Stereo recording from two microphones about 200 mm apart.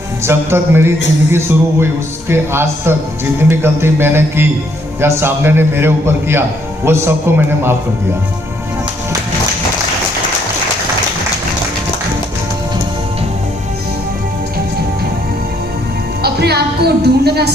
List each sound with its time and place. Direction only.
0.3 s a man's voice: 10° right (ahead or behind)
16.2 s a woman's voice: 55° right (ahead or behind)